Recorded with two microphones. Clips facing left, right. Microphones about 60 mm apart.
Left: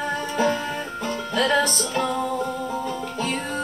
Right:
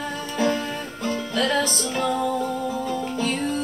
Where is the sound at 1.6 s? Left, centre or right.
Centre.